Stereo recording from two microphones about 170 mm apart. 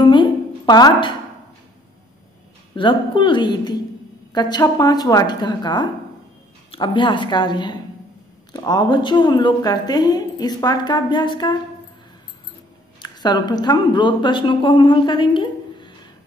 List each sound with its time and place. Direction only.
0.0 s a sound: 30° left (ahead or behind)
2.7 s a woman's voice: 30° left (ahead or behind)
13.0 s a woman's voice: 25° left (ahead or behind)